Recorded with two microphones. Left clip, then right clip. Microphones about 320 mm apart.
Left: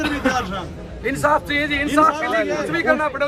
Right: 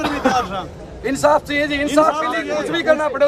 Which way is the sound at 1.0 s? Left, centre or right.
Centre.